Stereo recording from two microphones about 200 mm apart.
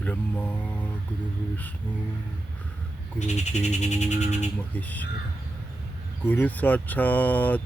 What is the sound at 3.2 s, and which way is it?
Speech, 35° left (ahead or behind).